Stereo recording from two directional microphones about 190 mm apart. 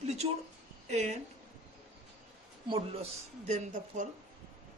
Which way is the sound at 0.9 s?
40° right (ahead or behind).